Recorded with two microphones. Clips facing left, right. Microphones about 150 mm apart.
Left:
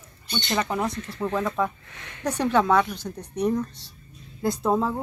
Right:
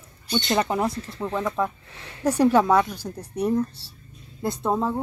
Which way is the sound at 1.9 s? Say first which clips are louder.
Right 1 dB; 30° right (ahead or behind).